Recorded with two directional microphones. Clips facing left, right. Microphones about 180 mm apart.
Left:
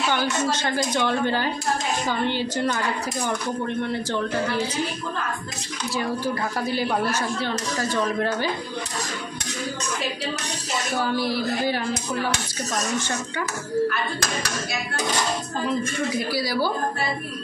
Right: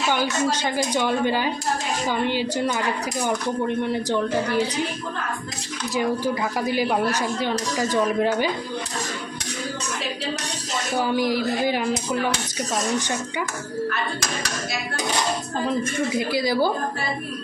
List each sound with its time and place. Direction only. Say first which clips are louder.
0.1 s speech: right 4 dB; 15° right (ahead or behind)
5.9 s speech: right 3 dB; 15° right (ahead or behind)
11.0 s speech: right 3 dB; 15° right (ahead or behind)
16.3 s speech: right 3 dB; 20° right (ahead or behind)